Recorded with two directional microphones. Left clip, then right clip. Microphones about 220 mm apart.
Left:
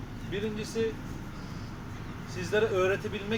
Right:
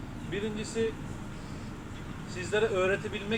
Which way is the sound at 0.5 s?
15° left (ahead or behind).